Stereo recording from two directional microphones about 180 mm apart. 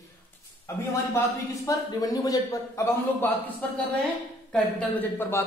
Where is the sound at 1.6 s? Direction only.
20° left (ahead or behind).